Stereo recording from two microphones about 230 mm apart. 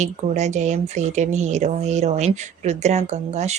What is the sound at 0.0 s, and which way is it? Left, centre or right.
Speech, right.